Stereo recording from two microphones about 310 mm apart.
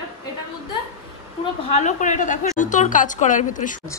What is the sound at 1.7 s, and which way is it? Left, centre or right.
A woman's voice, left.